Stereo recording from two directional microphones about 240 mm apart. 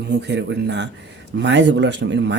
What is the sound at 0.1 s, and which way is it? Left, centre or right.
Speech, right.